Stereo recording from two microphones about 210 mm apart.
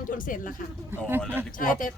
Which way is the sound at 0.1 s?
40° left (ahead or behind).